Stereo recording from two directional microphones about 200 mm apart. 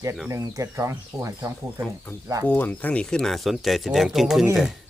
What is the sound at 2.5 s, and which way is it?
Speech, 10° left (ahead or behind).